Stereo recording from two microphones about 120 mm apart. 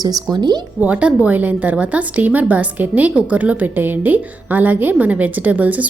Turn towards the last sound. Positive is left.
turn(degrees=-10)  # may be behind; listen again after turning